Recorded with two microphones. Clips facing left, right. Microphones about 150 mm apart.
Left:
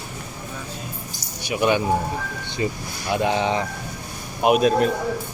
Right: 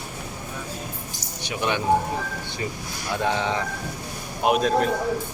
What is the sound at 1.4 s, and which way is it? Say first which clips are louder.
Speech: left 6 dB; 10° left (ahead or behind).